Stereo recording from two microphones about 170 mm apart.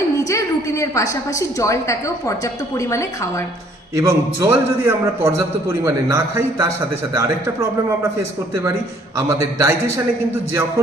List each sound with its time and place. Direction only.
0.3 s a woman's voice: 20° left (ahead or behind)
3.9 s a man's voice: 15° right (ahead or behind)
9.1 s a man's voice: 20° right (ahead or behind)